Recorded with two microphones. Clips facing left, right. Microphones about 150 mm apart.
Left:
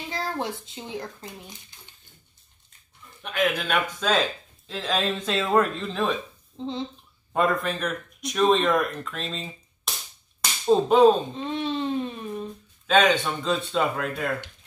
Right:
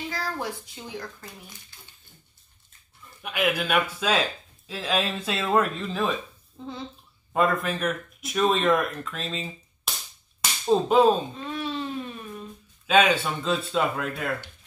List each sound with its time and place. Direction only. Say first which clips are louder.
0.1 s a child's voice: left 6 dB; 25° left (ahead or behind)
3.2 s speech: left 1 dB; 10° right (ahead or behind)
6.6 s speech: left 6 dB; 25° left (ahead or behind)
7.3 s speech: even; centre (ahead or behind)
10.7 s speech: left 2 dB; centre (ahead or behind)
11.3 s a sound: left 3 dB; 25° left (ahead or behind)
12.8 s speech: left 1 dB; 5° right (ahead or behind)